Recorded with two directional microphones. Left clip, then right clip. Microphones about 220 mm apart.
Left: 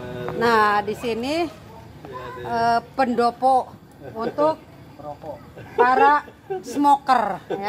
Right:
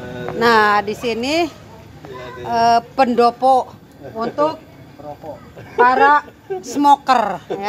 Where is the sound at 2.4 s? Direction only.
30° right (ahead or behind).